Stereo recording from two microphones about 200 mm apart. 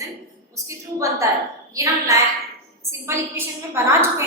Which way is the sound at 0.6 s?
15° right (ahead or behind).